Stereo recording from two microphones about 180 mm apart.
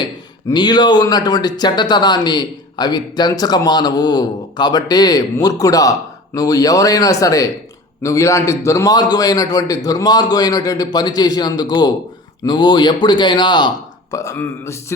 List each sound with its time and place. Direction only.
0.5 s speech: 25° left (ahead or behind)